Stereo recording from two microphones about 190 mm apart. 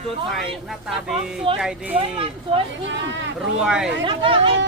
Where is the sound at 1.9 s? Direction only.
30° right (ahead or behind).